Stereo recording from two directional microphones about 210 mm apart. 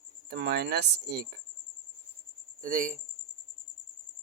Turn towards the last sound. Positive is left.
turn(degrees=-40)  # may be behind; listen again after turning